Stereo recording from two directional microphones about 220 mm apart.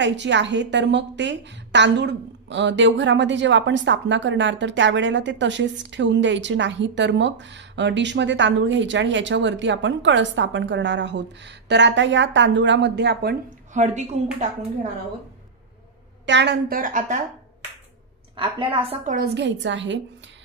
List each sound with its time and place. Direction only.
0.0 s a woman's voice: 55° right (ahead or behind)
13.8 s a woman's voice: 30° right (ahead or behind)
16.3 s a woman's voice: 50° right (ahead or behind)
18.3 s a woman's voice: 20° right (ahead or behind)
19.1 s a woman's voice: 50° right (ahead or behind)